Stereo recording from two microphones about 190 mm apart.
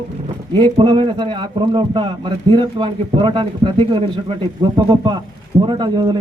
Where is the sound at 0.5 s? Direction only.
25° right (ahead or behind).